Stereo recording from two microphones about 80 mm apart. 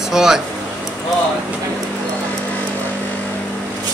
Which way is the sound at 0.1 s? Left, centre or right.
Centre.